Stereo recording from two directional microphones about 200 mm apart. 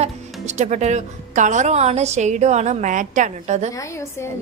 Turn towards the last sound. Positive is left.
turn(degrees=-35)  # may be behind; listen again after turning